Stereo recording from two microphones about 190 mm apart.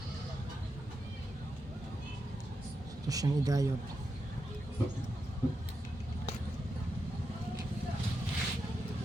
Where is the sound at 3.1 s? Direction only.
20° right (ahead or behind).